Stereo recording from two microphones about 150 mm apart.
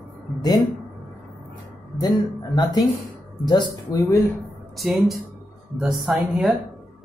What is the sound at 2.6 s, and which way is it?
Speech, 25° left (ahead or behind).